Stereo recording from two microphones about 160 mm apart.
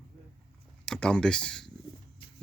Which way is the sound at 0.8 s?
5° left (ahead or behind).